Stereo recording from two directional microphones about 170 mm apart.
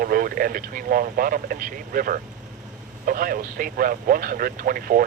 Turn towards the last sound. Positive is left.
turn(degrees=-55)  # may be behind; listen again after turning